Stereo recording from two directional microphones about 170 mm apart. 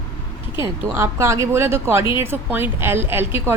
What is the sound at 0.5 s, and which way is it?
A woman's voice, 15° right (ahead or behind).